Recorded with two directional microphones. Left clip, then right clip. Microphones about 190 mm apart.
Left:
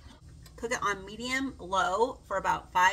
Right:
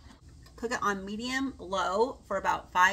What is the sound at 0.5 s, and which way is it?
Speech, 25° right (ahead or behind).